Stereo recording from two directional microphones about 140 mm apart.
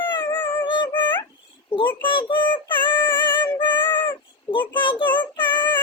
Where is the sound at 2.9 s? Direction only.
15° left (ahead or behind).